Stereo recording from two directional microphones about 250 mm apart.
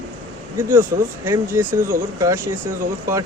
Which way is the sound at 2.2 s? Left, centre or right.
Centre.